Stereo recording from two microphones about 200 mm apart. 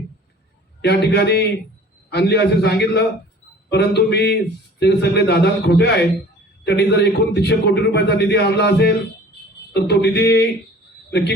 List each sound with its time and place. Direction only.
0.8 s a man's voice: 55° left (ahead or behind)